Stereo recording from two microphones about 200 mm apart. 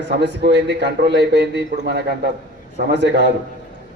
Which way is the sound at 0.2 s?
55° right (ahead or behind).